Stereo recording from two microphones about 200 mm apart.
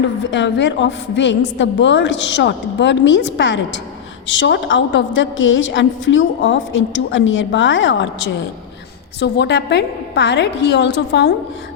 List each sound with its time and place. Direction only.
0.3 s a woman's voice: 65° left (ahead or behind)